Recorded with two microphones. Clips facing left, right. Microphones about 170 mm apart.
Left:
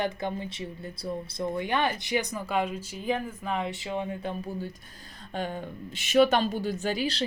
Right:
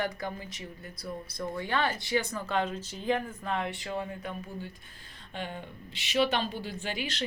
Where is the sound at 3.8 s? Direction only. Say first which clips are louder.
Left 4 dB; 20° left (ahead or behind).